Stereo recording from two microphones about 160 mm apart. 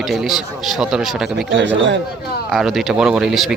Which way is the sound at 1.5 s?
90° right.